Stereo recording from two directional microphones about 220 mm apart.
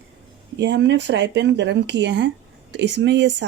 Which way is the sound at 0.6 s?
55° right (ahead or behind).